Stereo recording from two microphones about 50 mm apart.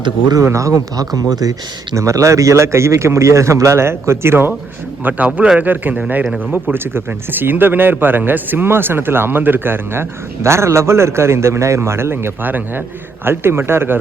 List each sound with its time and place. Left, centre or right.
0.4 s speech: right
2.0 s a man's voice: right
5.0 s speech: right
12.4 s speech: right
13.2 s speech: right